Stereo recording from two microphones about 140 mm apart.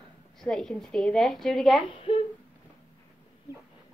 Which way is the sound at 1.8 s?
40° left (ahead or behind).